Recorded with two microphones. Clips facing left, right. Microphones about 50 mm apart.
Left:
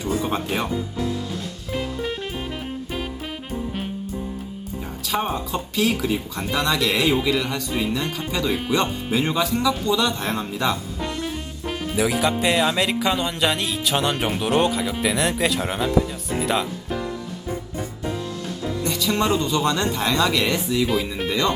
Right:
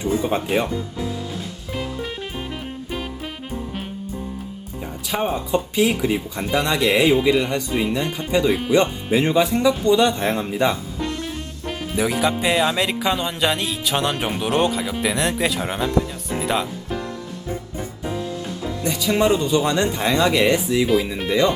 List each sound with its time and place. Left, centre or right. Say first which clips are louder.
0.0 s speech: right 3 dB; centre
1.7 s music: left 2 dB; centre
5.0 s speech: right 1 dB; centre
11.0 s music: right 2 dB; centre
17.7 s music: even; centre
18.6 s speech: even; centre
20.8 s music: right 4 dB; centre